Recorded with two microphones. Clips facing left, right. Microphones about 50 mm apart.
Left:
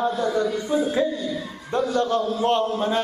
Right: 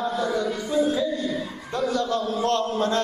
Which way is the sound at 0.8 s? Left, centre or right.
Left.